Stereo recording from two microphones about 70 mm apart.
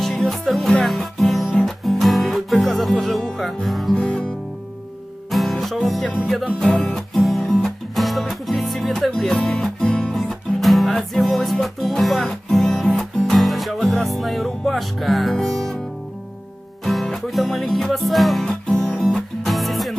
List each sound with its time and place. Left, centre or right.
0.0 s music: centre
3.9 s music: centre
5.3 s music: centre
16.8 s music: centre
18.7 s music: centre
19.1 s music: centre